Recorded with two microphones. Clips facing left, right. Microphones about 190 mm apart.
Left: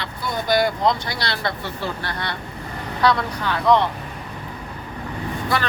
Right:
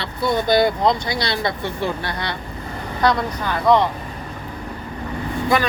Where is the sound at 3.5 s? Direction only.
10° right (ahead or behind).